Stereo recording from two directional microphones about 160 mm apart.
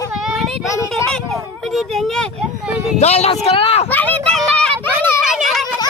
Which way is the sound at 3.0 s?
40° left (ahead or behind).